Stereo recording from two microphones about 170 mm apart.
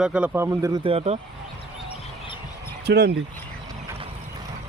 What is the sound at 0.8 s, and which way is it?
Speech, 35° right (ahead or behind).